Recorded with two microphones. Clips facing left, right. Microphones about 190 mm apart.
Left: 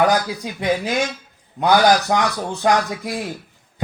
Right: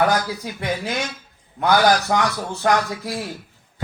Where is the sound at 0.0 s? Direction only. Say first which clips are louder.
Left 2 dB; 15° left (ahead or behind).